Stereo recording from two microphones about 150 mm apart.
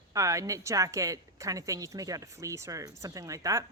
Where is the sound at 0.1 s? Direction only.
20° right (ahead or behind).